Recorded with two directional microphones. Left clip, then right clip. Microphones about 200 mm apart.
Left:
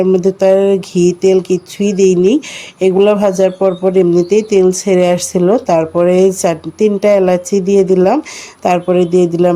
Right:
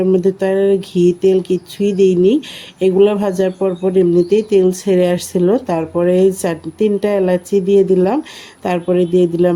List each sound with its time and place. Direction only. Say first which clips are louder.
0.0 s speech: left 4 dB; 15° left (ahead or behind)